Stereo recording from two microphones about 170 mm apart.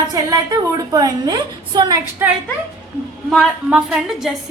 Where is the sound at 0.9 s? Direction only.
25° right (ahead or behind).